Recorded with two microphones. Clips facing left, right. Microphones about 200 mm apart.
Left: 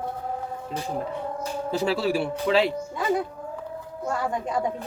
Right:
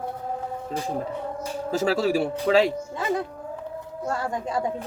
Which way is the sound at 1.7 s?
45° right (ahead or behind).